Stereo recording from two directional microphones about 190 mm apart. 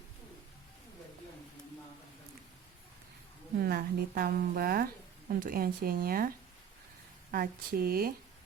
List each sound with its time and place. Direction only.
3.6 s a woman's voice: 55° right (ahead or behind)